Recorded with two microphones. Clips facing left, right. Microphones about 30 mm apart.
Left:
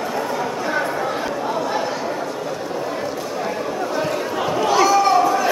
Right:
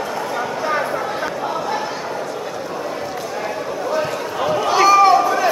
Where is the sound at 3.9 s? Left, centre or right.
Centre.